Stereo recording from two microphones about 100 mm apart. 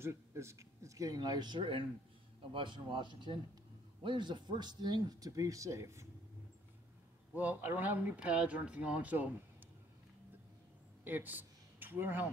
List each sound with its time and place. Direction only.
0.0 s speech: 25° right (ahead or behind)
7.3 s speech: 15° right (ahead or behind)
11.1 s speech: 20° right (ahead or behind)